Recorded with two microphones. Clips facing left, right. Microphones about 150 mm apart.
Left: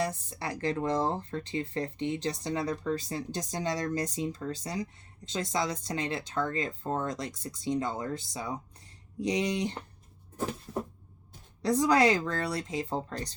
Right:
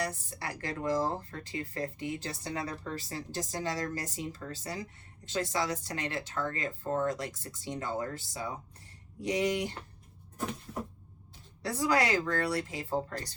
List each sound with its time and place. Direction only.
0.0 s speech: 25° left (ahead or behind)
11.6 s speech: 20° left (ahead or behind)